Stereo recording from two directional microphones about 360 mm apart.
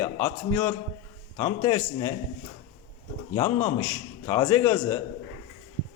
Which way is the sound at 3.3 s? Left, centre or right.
Centre.